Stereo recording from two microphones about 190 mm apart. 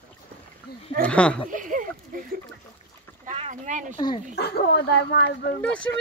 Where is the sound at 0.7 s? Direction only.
55° left (ahead or behind).